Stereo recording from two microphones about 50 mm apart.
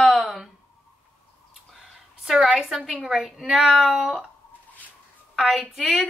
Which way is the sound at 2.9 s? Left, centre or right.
Centre.